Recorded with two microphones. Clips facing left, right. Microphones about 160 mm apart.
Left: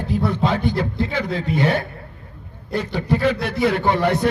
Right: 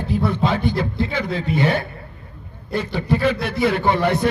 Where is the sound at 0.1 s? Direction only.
45° left (ahead or behind).